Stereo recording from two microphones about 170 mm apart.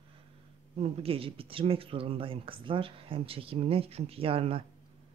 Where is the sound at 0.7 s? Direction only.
35° right (ahead or behind).